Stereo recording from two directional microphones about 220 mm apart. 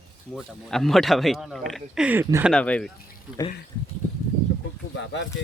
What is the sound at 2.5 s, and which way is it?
Speech, 5° left (ahead or behind).